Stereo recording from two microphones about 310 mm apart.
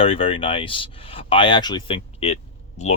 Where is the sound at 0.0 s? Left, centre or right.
Centre.